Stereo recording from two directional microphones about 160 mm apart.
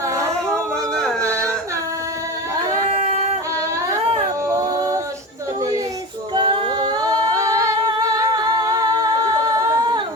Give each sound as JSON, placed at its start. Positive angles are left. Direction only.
{"t": 2.9, "sound": "yodeling", "side_deg": -40}
{"t": 4.4, "sound": "a sound", "side_deg": -20}
{"t": 6.3, "sound": "singing", "side_deg": -30}